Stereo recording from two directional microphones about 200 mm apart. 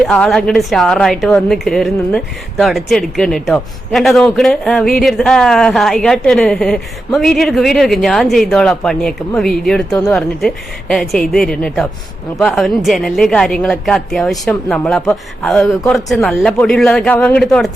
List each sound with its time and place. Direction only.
0.0 s a woman's voice: centre (ahead or behind)